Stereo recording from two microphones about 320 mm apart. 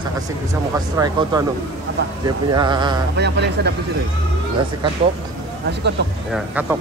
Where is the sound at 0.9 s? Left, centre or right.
Centre.